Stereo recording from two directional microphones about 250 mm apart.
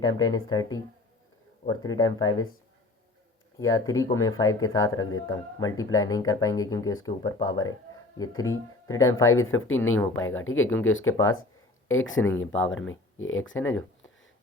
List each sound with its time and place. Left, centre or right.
0.0 s speech: centre
3.6 s speech: centre
9.3 s speech: left